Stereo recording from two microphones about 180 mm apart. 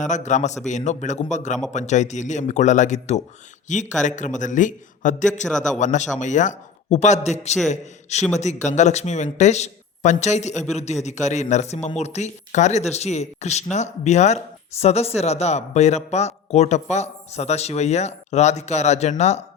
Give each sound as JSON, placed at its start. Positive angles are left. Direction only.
{"t": 0.0, "sound": "a man's voice", "side_deg": 40}